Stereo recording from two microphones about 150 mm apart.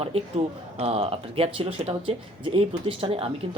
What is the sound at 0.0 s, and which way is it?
Speech, 40° right (ahead or behind).